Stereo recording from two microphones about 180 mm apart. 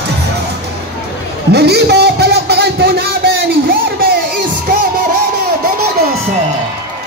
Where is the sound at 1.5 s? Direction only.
65° right (ahead or behind).